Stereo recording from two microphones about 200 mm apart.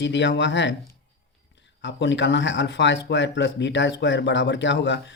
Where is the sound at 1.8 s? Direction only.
65° left (ahead or behind).